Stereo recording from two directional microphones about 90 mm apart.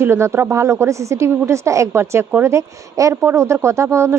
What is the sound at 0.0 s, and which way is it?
Speech, 30° right (ahead or behind).